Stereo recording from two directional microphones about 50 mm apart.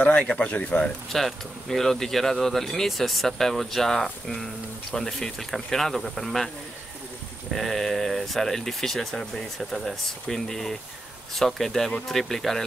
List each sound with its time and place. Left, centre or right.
0.0 s speech: left
1.1 s speech: centre
7.5 s speech: centre